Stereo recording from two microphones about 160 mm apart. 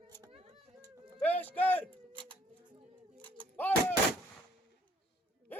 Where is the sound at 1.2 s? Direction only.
10° left (ahead or behind).